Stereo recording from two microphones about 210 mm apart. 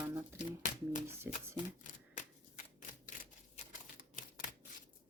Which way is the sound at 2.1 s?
35° left (ahead or behind).